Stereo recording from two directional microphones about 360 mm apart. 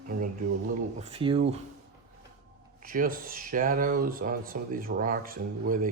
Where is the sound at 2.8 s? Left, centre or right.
Right.